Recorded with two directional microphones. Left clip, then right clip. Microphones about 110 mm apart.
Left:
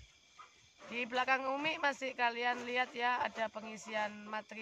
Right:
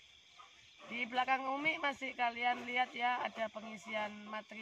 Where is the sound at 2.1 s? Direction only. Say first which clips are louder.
Left 1 dB; 30° left (ahead or behind).